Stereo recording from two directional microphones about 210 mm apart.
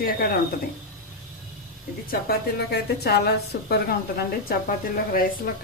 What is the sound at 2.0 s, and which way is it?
A woman's voice, 50° left (ahead or behind).